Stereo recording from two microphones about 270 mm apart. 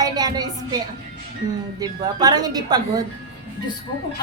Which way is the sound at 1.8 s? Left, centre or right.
Centre.